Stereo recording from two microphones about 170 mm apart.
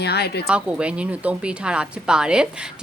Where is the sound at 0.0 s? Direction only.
70° left (ahead or behind).